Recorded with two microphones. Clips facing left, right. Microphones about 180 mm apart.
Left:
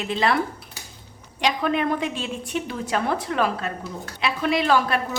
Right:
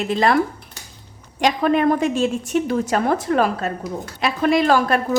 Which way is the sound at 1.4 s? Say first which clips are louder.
Right 5 dB; 45° right (ahead or behind).